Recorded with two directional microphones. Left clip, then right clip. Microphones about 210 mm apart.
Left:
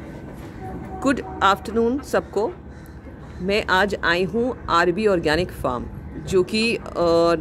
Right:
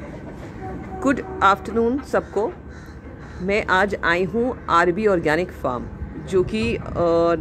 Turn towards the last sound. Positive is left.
turn(degrees=10)  # may be behind; listen again after turning